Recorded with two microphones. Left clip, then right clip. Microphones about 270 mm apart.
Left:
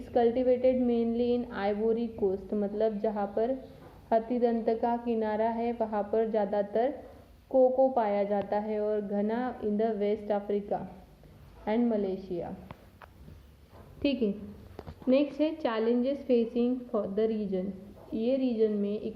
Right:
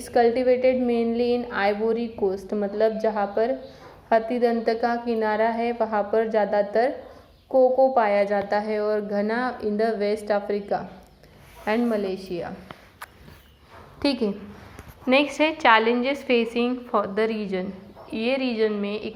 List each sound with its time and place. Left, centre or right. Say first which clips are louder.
0.1 s a woman's voice: right 6 dB; centre
7.5 s a woman's voice: right 6 dB; right
7.9 s a woman's voice: right 8 dB; centre
14.0 s a woman's voice: right 5 dB; centre